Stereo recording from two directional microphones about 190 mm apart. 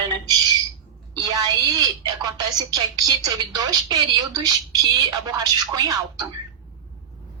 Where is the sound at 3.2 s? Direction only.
20° right (ahead or behind).